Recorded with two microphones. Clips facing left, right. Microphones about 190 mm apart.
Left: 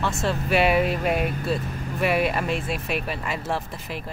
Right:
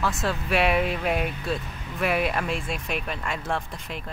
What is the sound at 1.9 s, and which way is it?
Speech, centre (ahead or behind).